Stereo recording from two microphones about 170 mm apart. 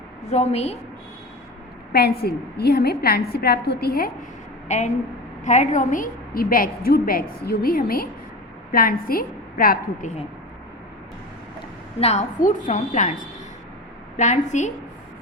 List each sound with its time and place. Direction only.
0.3 s a woman's voice: 40° left (ahead or behind)
1.9 s a woman's voice: 65° left (ahead or behind)
4.7 s a woman's voice: 45° left (ahead or behind); by 10.1 s 60° left (ahead or behind)
11.9 s a woman's voice: 40° left (ahead or behind)
12.4 s a woman's voice: 50° left (ahead or behind)